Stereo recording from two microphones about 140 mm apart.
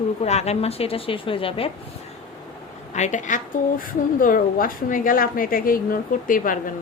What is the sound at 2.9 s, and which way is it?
A woman's voice, 60° left (ahead or behind).